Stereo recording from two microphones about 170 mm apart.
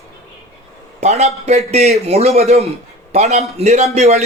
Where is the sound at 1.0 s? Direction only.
40° right (ahead or behind).